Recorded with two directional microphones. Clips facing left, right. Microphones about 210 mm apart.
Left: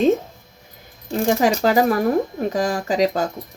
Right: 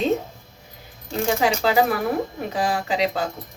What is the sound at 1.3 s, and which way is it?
Speech, 45° left (ahead or behind).